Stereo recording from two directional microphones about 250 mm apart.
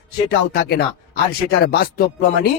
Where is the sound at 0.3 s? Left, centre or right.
Left.